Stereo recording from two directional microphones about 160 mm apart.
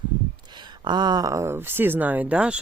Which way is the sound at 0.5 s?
30° right (ahead or behind).